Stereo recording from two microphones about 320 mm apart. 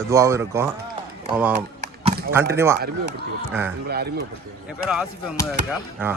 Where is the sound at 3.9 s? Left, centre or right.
Right.